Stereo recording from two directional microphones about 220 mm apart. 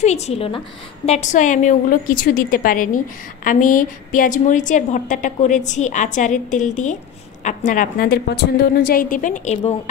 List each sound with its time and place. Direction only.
0.0 s a woman's voice: 30° left (ahead or behind)